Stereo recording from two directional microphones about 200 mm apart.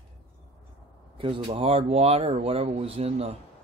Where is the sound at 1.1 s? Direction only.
25° right (ahead or behind).